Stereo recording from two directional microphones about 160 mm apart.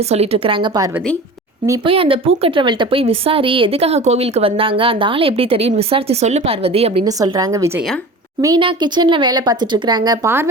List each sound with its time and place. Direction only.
0.1 s speech: 40° right (ahead or behind)
7.0 s speech: 25° right (ahead or behind)